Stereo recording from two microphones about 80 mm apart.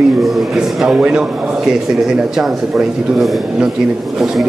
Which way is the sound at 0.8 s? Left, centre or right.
Centre.